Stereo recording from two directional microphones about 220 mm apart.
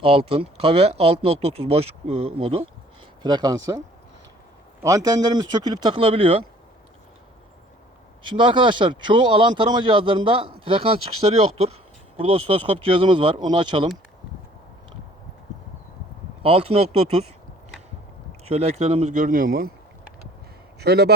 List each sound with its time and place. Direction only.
0.0 s speech: 25° right (ahead or behind)
4.8 s speech: 15° right (ahead or behind)
8.2 s speech: 20° right (ahead or behind)
16.4 s speech: 25° right (ahead or behind)
18.4 s speech: 30° right (ahead or behind)
20.7 s a man's voice: 50° right (ahead or behind)